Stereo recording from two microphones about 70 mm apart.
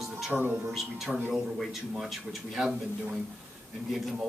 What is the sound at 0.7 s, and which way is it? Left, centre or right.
Speech, centre.